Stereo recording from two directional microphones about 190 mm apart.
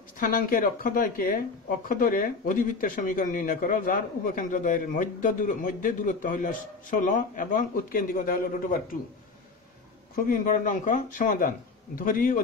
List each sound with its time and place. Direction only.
0.2 s speech: 45° left (ahead or behind)
10.1 s speech: 45° left (ahead or behind)